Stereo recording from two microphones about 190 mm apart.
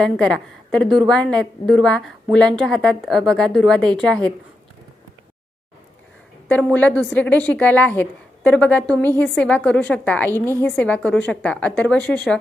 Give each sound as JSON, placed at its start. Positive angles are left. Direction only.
{"t": 0.0, "sound": "a woman's voice", "side_deg": 5}
{"t": 6.5, "sound": "speech", "side_deg": 10}